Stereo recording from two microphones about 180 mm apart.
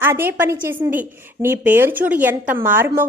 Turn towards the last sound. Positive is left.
turn(degrees=-15)  # may be behind; listen again after turning